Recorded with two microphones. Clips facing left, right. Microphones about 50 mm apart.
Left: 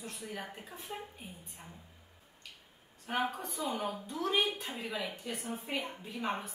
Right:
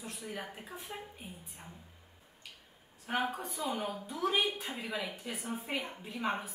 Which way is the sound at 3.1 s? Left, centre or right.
Centre.